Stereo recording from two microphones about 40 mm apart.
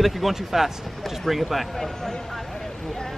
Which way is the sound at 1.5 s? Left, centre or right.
Centre.